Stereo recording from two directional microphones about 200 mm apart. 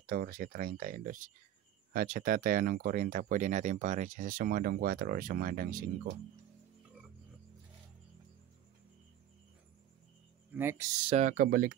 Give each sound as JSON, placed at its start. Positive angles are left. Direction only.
{"t": 0.0, "sound": "speech", "side_deg": -45}
{"t": 10.5, "sound": "speech", "side_deg": -10}
{"t": 11.1, "sound": "speech", "side_deg": -35}